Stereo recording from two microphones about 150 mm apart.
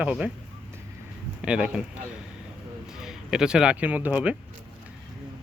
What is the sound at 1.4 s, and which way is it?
Speech, 5° right (ahead or behind).